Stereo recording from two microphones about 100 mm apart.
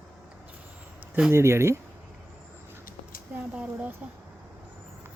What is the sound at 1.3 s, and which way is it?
Speech, 25° right (ahead or behind).